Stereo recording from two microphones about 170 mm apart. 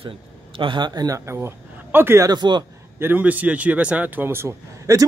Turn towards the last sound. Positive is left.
turn(degrees=-15)  # may be behind; listen again after turning